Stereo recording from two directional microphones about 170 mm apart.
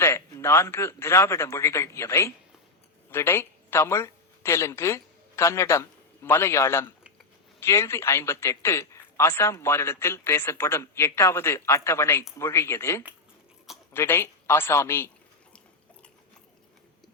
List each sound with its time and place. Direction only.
0.0 s a man's voice: 15° left (ahead or behind)